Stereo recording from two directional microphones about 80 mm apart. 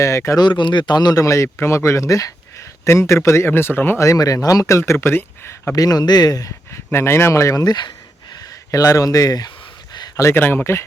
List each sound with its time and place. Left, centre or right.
0.0 s speech: left
0.3 s speech: left
1.2 s speech: left
4.0 s speech: left
4.8 s speech: left
5.7 s speech: left
6.9 s speech: left
10.3 s speech: left